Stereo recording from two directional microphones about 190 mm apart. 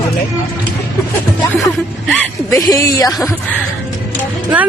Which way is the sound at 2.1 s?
15° left (ahead or behind).